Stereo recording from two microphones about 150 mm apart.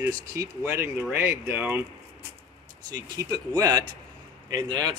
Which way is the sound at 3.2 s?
25° right (ahead or behind).